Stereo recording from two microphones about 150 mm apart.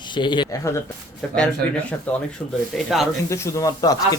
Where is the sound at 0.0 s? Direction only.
30° left (ahead or behind).